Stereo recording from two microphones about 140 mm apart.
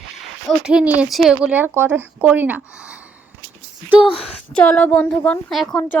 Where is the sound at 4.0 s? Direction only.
40° left (ahead or behind).